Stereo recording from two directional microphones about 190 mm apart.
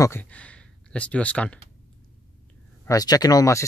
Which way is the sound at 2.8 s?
20° left (ahead or behind).